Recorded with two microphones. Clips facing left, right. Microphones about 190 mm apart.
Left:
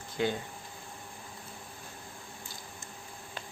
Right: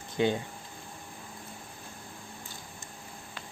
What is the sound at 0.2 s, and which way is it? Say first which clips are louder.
Speech: right 4 dB; 20° right (ahead or behind).